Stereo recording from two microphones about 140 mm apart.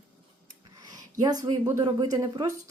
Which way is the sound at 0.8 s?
25° right (ahead or behind).